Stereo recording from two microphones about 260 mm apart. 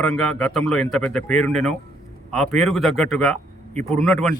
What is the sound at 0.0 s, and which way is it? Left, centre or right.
Speech, centre.